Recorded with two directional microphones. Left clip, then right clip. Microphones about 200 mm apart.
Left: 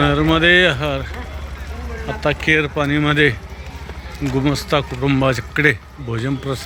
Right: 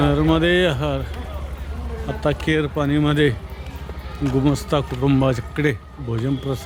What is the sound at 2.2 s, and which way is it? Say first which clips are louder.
A man's voice: left 4 dB; 15° right (ahead or behind).